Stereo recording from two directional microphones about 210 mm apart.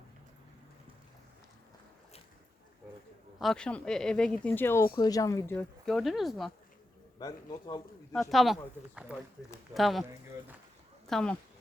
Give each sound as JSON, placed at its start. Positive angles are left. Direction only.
{"t": 3.3, "sound": "speech", "side_deg": 0}
{"t": 5.8, "sound": "speech", "side_deg": 0}
{"t": 7.2, "sound": "a man's voice", "side_deg": 20}
{"t": 8.1, "sound": "speech", "side_deg": 0}
{"t": 11.0, "sound": "speech", "side_deg": 5}